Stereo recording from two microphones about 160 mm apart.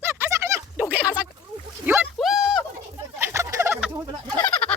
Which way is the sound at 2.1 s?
Centre (ahead or behind).